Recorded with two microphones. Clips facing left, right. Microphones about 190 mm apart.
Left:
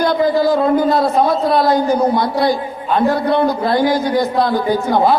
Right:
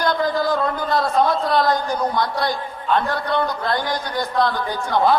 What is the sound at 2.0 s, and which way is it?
Speech, 25° left (ahead or behind).